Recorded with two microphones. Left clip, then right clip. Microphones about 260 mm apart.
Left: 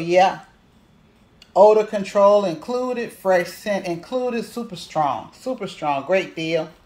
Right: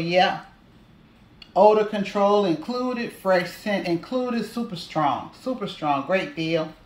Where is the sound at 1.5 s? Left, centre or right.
Centre.